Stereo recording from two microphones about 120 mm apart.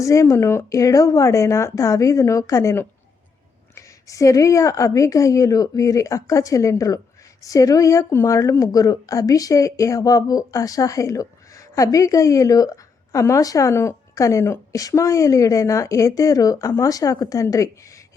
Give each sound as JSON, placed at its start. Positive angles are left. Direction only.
{"t": 0.0, "sound": "speech", "side_deg": 25}